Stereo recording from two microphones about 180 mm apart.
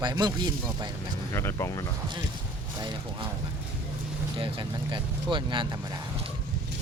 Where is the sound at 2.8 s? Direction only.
25° right (ahead or behind).